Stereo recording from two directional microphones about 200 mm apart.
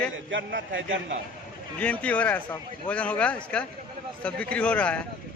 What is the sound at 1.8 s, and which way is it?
Speech, 5° left (ahead or behind).